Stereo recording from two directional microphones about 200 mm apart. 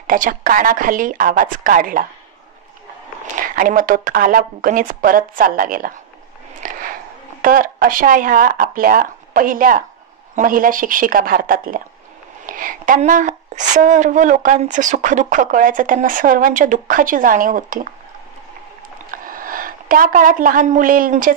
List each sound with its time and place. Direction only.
0.0 s a woman's voice: 40° right (ahead or behind)
3.3 s a woman's voice: 45° right (ahead or behind)
6.6 s a sound: 45° right (ahead or behind)
7.4 s a woman's voice: 45° right (ahead or behind)
19.0 s a woman's voice: 45° right (ahead or behind)